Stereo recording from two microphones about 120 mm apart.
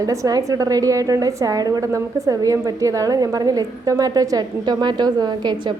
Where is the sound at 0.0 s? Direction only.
30° right (ahead or behind).